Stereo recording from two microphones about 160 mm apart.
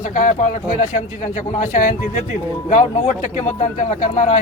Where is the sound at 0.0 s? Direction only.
50° left (ahead or behind).